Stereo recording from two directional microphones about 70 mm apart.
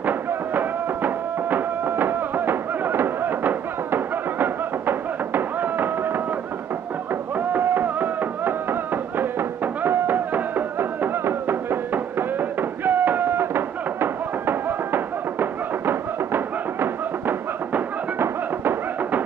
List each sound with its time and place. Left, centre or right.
0.0 s music: right
7.3 s music: right